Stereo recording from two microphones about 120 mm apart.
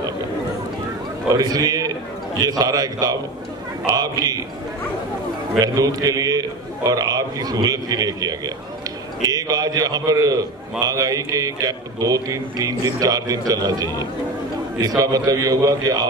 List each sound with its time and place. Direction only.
1.3 s a man's voice: 30° right (ahead or behind)
5.6 s a man's voice: 30° right (ahead or behind)